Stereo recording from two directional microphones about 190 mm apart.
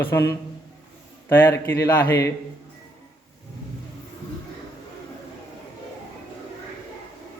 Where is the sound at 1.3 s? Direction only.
10° left (ahead or behind).